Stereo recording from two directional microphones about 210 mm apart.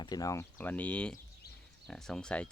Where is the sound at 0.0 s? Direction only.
15° left (ahead or behind).